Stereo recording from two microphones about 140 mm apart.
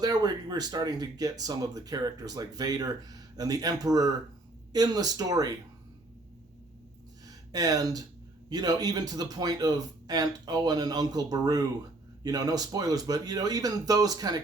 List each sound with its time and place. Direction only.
0.0 s speech: 30° right (ahead or behind)
7.3 s a sound: 25° right (ahead or behind)
8.4 s speech: 30° right (ahead or behind)